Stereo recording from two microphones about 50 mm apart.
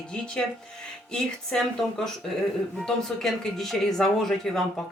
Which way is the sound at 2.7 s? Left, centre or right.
Centre.